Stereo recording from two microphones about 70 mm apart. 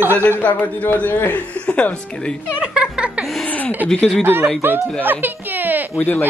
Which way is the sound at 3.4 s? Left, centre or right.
Left.